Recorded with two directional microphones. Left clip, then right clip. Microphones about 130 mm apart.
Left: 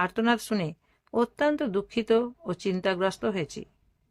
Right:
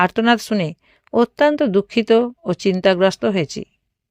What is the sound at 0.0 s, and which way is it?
Speech, 55° right (ahead or behind).